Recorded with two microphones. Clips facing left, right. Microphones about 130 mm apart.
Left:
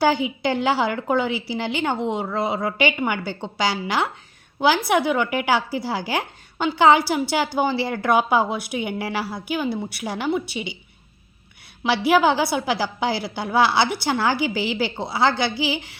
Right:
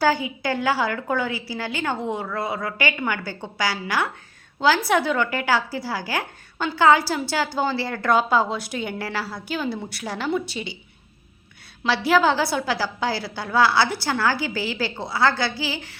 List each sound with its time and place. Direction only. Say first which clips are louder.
0.0 s a woman's voice: left 2 dB; 20° left (ahead or behind)
11.8 s a woman's voice: left 1 dB; 15° left (ahead or behind)